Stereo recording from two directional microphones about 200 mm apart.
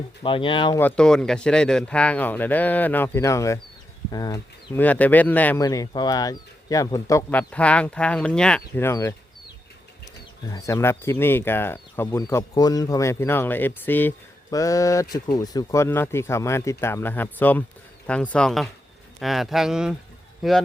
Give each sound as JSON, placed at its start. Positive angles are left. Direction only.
{"t": 0.2, "sound": "speech", "side_deg": 25}
{"t": 0.8, "sound": "speech", "side_deg": 5}
{"t": 10.4, "sound": "speech", "side_deg": 15}